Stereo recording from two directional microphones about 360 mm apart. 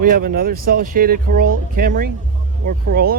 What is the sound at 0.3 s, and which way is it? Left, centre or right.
Speech, right.